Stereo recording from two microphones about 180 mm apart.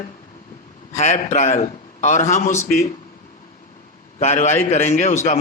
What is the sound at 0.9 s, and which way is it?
A man's voice, 40° left (ahead or behind).